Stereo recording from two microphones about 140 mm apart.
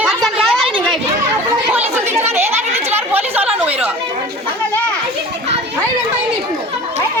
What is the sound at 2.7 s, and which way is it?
Chatter, 15° right (ahead or behind).